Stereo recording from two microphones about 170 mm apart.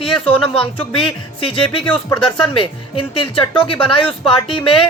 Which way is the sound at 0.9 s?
30° left (ahead or behind).